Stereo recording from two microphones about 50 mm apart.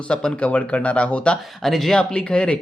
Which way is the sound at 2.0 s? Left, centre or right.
Centre.